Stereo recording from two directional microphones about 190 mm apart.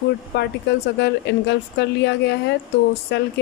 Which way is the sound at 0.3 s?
60° left (ahead or behind).